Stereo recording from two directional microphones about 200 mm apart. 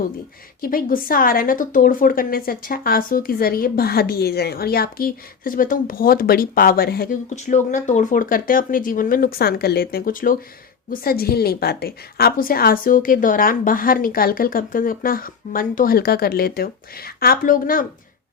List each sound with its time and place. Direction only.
0.6 s a woman's voice: 45° left (ahead or behind)